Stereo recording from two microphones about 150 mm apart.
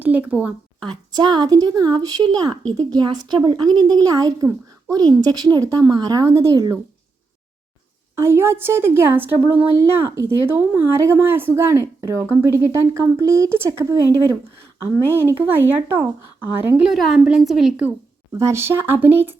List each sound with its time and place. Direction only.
0.0 s a woman's voice: 10° right (ahead or behind)
0.9 s a woman's voice: 30° right (ahead or behind)
8.1 s a woman's voice: 15° right (ahead or behind)
18.3 s a woman's voice: 20° right (ahead or behind)